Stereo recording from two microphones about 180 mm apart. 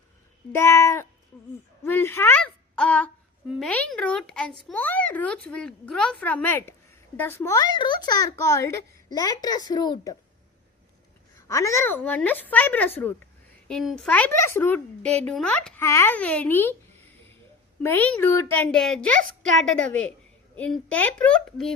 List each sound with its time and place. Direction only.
0.5 s a woman's voice: 15° left (ahead or behind)
11.3 s a child's voice: 15° left (ahead or behind)
17.8 s a child's voice: 10° left (ahead or behind)